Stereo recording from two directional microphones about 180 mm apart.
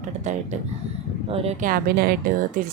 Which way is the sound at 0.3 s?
40° right (ahead or behind).